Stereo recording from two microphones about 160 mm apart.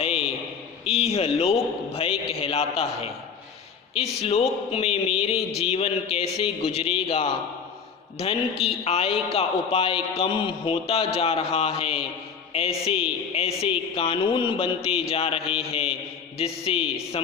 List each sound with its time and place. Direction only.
0.0 s a sound: 40° left (ahead or behind)
0.9 s a woman's voice: 40° left (ahead or behind)
8.8 s a woman's voice: 40° left (ahead or behind)